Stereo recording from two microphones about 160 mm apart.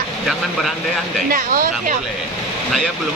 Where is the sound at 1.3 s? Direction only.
60° right (ahead or behind).